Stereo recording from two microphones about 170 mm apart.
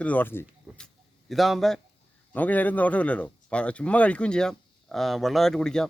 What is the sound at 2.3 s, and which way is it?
Speech, 10° left (ahead or behind).